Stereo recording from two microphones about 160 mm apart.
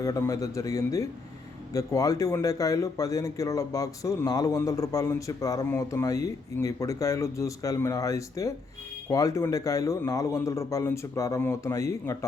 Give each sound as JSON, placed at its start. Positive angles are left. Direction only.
{"t": 0.0, "sound": "speech", "side_deg": 20}